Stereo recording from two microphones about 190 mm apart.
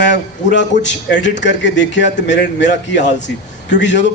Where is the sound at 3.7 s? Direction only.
65° left (ahead or behind).